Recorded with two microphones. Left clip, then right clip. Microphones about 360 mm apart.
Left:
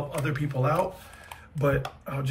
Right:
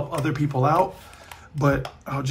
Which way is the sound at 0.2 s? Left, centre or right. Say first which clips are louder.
Right 6 dB; centre.